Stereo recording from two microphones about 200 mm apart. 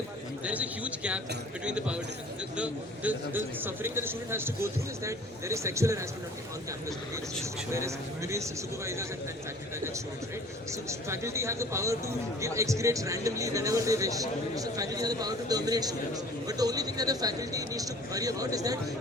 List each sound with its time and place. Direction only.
0.4 s a man's voice: 5° right (ahead or behind)
7.7 s speech: 15° right (ahead or behind)
10.7 s speech: 15° right (ahead or behind)